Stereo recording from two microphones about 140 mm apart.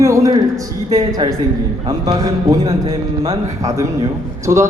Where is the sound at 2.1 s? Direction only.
30° right (ahead or behind).